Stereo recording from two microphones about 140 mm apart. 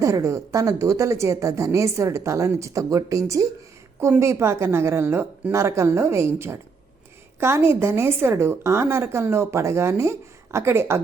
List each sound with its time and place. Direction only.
0.0 s a woman's voice: 20° right (ahead or behind)